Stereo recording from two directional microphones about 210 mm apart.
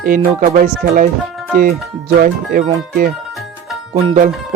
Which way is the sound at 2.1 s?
45° right (ahead or behind).